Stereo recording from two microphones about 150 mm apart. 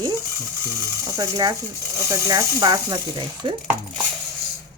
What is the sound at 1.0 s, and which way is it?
Speech, 20° right (ahead or behind).